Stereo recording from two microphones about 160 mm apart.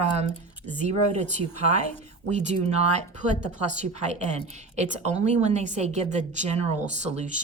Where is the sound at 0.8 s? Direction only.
45° right (ahead or behind).